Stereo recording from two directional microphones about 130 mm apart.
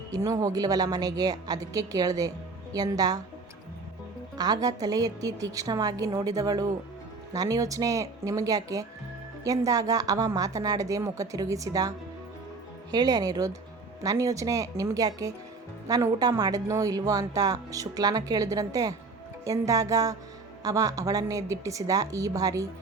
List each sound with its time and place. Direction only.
0.1 s speech: 25° right (ahead or behind)
4.4 s speech: 30° right (ahead or behind)